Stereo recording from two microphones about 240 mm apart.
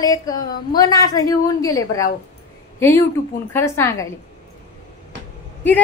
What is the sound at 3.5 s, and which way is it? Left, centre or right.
Speech, centre.